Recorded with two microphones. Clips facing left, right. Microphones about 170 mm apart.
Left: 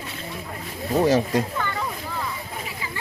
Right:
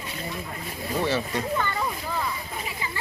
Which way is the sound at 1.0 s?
45° left (ahead or behind).